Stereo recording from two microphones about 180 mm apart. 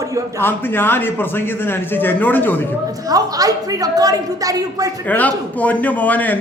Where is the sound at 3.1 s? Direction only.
20° right (ahead or behind).